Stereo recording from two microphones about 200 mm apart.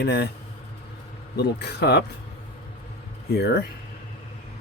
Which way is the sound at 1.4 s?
55° left (ahead or behind).